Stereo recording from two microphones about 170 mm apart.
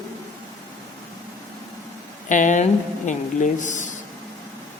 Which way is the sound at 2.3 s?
45° left (ahead or behind).